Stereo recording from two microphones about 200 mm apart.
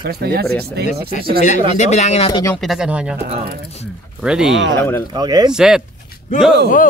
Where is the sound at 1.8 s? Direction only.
35° left (ahead or behind).